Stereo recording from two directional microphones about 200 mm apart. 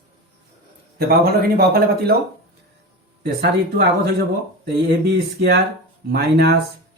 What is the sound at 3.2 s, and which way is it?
Speech, 55° right (ahead or behind).